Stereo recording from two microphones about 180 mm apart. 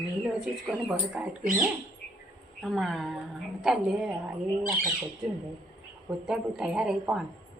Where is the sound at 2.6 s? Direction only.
Centre (ahead or behind).